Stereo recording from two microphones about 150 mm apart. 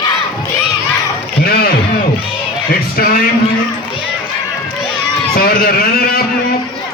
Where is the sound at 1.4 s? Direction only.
90° left.